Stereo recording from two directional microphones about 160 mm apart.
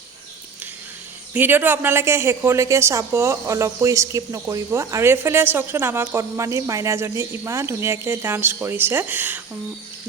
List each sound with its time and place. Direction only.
1.3 s speech: 10° right (ahead or behind)